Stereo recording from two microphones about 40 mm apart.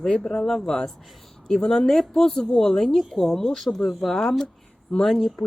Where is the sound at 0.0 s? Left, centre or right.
Centre.